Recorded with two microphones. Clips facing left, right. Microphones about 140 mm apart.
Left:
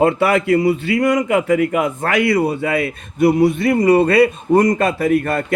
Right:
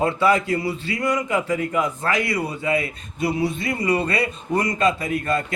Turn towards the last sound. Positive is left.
turn(degrees=65)  # may be behind; listen again after turning